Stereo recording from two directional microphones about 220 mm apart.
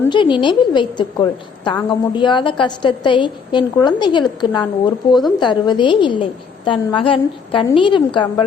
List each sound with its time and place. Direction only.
0.0 s a woman's voice: 20° left (ahead or behind)